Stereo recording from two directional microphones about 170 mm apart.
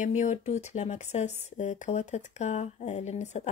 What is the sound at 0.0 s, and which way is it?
Speech, 45° left (ahead or behind).